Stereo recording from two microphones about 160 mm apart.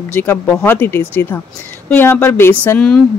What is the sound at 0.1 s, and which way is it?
A woman's voice, 15° left (ahead or behind).